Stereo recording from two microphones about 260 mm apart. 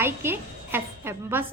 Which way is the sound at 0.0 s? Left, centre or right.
Centre.